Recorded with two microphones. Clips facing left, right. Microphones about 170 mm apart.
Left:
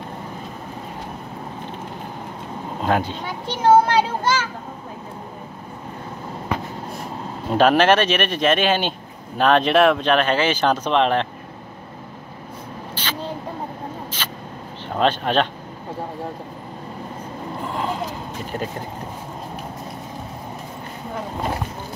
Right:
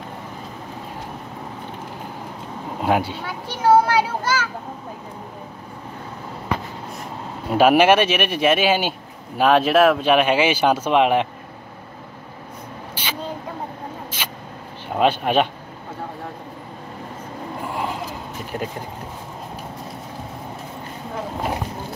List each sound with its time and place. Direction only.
2.8 s speech: 10° right (ahead or behind)
3.3 s children playing: 25° left (ahead or behind)
7.4 s speech: 10° right (ahead or behind)
12.9 s a sound: 10° right (ahead or behind)
15.0 s speech: 10° right (ahead or behind)